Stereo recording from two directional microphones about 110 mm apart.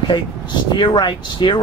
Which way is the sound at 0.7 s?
40° left (ahead or behind).